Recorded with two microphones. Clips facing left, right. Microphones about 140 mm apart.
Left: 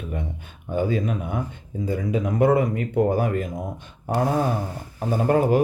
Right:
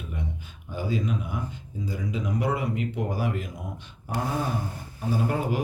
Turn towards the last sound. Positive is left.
turn(degrees=50)  # may be behind; listen again after turning